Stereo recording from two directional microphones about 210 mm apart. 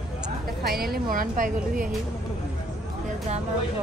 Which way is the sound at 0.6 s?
45° right (ahead or behind).